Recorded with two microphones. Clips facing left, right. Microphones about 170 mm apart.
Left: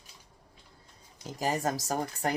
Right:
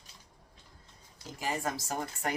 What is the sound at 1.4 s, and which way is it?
Speech, 40° left (ahead or behind).